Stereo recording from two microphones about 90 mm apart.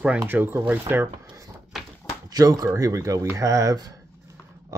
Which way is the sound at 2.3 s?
45° right (ahead or behind).